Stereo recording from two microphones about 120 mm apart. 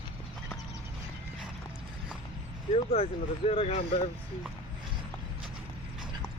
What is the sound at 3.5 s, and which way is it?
Speech, 55° left (ahead or behind).